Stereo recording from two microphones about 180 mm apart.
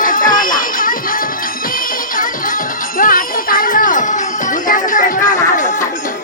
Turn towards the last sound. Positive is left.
turn(degrees=45)  # may be behind; listen again after turning